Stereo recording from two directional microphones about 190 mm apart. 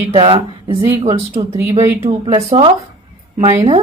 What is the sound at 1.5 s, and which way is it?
Speech, 15° right (ahead or behind).